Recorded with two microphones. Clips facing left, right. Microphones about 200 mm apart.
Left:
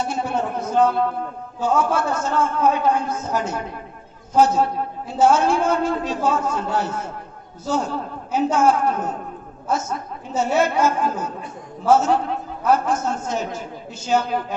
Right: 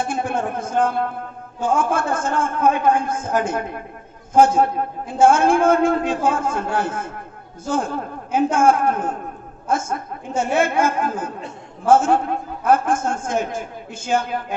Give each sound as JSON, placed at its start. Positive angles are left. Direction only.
{"t": 0.0, "sound": "a man's voice", "side_deg": -50}